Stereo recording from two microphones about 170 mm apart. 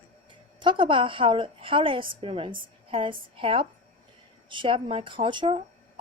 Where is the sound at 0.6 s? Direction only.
30° right (ahead or behind).